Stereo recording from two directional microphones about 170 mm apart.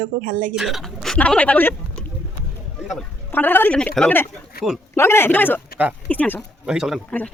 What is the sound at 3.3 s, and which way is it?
A woman's voice, 10° left (ahead or behind).